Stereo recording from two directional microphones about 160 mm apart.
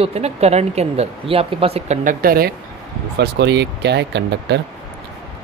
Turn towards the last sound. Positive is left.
turn(degrees=-90)